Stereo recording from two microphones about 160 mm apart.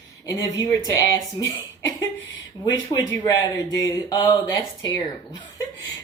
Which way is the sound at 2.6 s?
20° left (ahead or behind).